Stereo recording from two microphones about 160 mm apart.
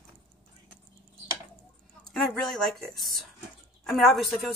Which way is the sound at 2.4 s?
Centre (ahead or behind).